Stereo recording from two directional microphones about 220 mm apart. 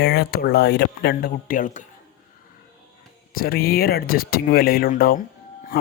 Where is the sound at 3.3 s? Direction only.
45° left (ahead or behind).